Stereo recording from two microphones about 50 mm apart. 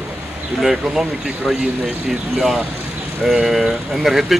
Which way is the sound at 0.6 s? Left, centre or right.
Centre.